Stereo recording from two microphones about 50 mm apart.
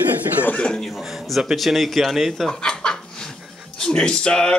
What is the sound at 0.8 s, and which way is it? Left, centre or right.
Speech, centre.